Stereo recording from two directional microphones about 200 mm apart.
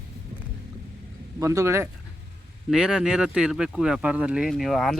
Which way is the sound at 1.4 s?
15° right (ahead or behind).